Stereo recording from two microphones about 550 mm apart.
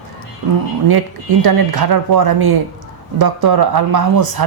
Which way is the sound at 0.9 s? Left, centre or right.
Right.